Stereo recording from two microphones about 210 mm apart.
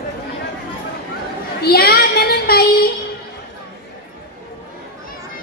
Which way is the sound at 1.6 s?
45° left (ahead or behind).